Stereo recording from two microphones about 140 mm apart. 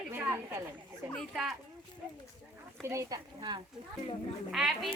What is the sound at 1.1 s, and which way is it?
Speech, centre (ahead or behind).